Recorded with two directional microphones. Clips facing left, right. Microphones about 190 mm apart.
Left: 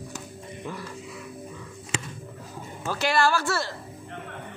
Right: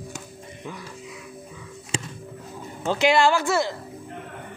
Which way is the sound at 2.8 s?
20° right (ahead or behind).